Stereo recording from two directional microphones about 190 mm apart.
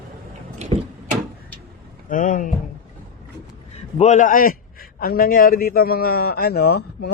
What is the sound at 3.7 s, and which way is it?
A man's voice, 35° left (ahead or behind).